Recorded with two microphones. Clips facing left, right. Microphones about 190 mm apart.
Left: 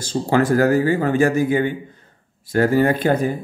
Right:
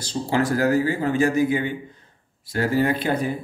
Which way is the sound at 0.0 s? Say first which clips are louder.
Left 4 dB; 50° left (ahead or behind).